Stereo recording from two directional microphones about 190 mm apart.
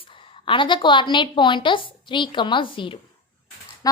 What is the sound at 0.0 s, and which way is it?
A woman's voice, 25° left (ahead or behind).